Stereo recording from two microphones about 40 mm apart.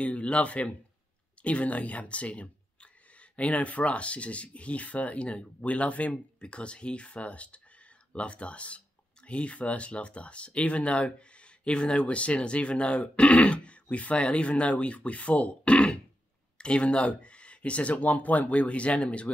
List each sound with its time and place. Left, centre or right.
0.0 s speech: left